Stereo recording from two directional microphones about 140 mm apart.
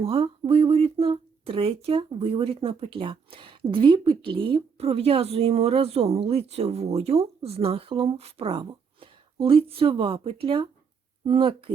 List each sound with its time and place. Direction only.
0.0 s speech: 45° right (ahead or behind)